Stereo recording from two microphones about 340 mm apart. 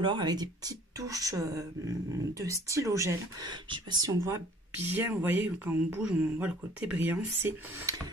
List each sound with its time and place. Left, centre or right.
0.0 s speech: centre